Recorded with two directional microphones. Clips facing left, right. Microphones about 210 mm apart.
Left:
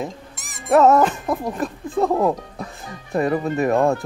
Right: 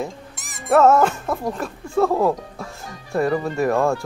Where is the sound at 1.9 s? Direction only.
15° left (ahead or behind).